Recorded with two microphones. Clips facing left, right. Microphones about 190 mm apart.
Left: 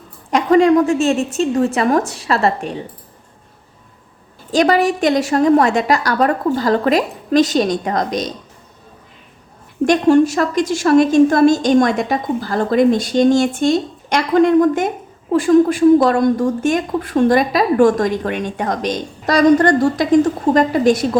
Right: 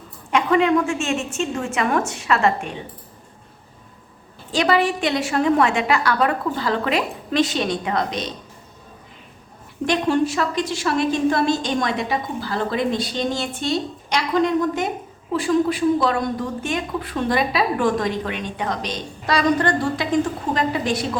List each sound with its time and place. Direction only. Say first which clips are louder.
0.3 s a woman's voice: left 6 dB; 40° left (ahead or behind)
4.5 s a woman's voice: left 5 dB; 45° left (ahead or behind)
9.8 s a woman's voice: left 8 dB; 45° left (ahead or behind)